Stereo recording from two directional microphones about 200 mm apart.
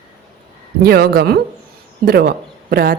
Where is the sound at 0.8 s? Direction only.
50° right (ahead or behind).